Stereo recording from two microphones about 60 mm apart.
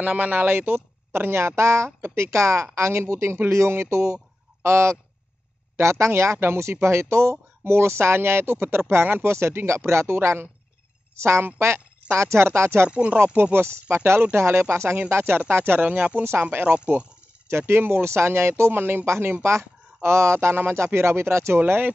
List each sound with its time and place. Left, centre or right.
0.0 s speech: right
12.9 s speech: right
13.4 s speech: right
17.5 s speech: right
21.5 s speech: right